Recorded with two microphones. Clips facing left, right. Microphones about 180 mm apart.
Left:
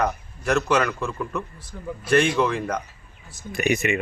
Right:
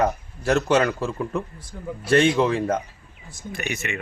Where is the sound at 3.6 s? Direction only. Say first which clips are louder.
Left 8 dB; 15° left (ahead or behind).